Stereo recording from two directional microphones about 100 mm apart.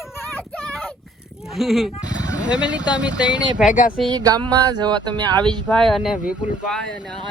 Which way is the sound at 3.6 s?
Centre (ahead or behind).